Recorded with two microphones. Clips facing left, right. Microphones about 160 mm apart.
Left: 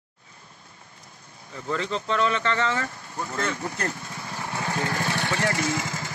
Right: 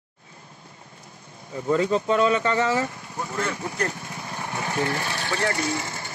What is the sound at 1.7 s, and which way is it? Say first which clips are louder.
Speech: right 6 dB; 15° right (ahead or behind).